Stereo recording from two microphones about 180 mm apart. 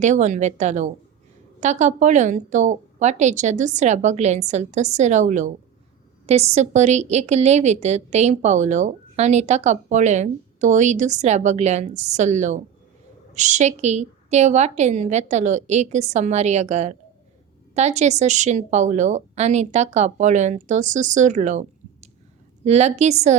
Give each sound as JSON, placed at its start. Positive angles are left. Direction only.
{"t": 0.0, "sound": "a woman's voice", "side_deg": -40}
{"t": 22.6, "sound": "a woman's voice", "side_deg": -35}